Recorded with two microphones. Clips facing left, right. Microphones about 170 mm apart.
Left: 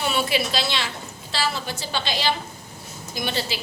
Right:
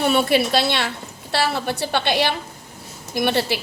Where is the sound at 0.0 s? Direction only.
55° right (ahead or behind).